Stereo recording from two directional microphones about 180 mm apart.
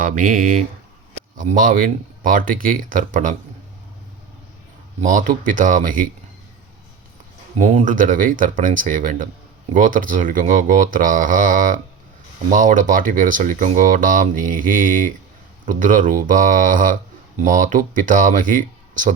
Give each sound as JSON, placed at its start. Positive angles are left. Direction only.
{"t": 0.0, "sound": "speech", "side_deg": -50}
{"t": 5.0, "sound": "speech", "side_deg": -45}
{"t": 7.6, "sound": "speech", "side_deg": -45}